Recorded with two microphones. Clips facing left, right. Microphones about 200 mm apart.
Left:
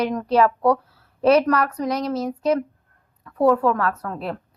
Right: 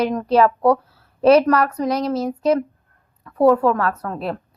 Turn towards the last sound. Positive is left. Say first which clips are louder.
# right 2 dB
turn(degrees=-35)  # may be behind; listen again after turning